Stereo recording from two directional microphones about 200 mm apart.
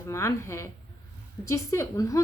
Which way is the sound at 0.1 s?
15° left (ahead or behind).